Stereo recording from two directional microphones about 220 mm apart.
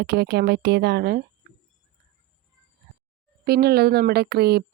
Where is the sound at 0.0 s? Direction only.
45° right (ahead or behind).